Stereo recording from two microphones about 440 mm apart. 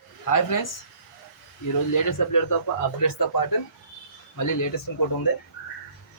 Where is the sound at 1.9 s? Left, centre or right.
Left.